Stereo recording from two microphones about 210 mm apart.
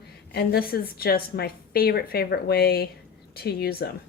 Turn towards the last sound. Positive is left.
turn(degrees=50)  # may be behind; listen again after turning